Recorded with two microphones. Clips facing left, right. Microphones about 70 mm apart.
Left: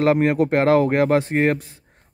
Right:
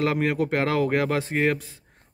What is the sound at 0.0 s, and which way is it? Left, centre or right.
A man's voice, left.